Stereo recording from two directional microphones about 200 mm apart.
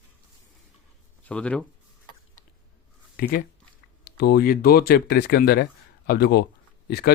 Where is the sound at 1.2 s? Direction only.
5° left (ahead or behind).